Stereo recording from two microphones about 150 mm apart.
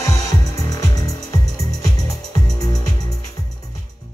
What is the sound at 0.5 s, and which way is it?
Music, 25° left (ahead or behind).